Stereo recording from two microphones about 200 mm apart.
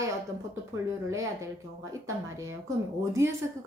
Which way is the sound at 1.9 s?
15° right (ahead or behind).